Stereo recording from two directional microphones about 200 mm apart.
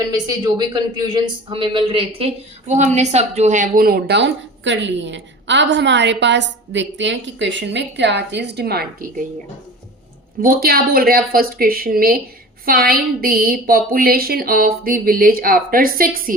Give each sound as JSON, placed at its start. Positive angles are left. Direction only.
{"t": 0.1, "sound": "a man's voice", "side_deg": -20}
{"t": 10.4, "sound": "a man's voice", "side_deg": -45}